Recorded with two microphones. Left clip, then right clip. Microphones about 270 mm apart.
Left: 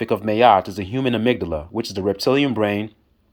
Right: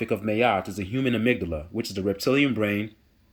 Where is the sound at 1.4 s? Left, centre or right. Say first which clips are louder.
Left 6 dB; left.